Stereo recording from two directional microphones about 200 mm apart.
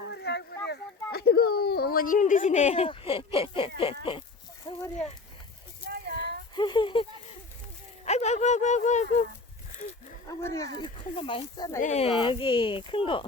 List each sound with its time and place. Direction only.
0.1 s speech: 55° left (ahead or behind); by 3.9 s 25° left (ahead or behind)
4.7 s a sound: 20° left (ahead or behind)
5.9 s a sound: 55° right (ahead or behind)
6.6 s speech: 25° left (ahead or behind)
8.0 s speech: 35° left (ahead or behind)
10.2 s speech: 15° left (ahead or behind)
11.8 s speech: 35° left (ahead or behind)